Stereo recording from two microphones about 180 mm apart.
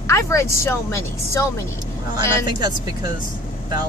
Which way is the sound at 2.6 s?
25° right (ahead or behind).